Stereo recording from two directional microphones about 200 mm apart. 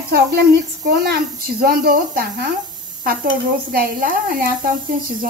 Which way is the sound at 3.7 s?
45° right (ahead or behind).